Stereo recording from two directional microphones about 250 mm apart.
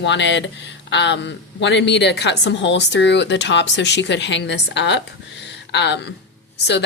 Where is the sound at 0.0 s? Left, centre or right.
Left.